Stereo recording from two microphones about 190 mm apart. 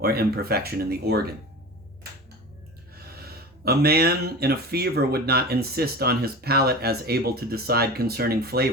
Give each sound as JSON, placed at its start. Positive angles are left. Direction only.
{"t": 0.0, "sound": "speech", "side_deg": -55}
{"t": 2.9, "sound": "speech", "side_deg": -55}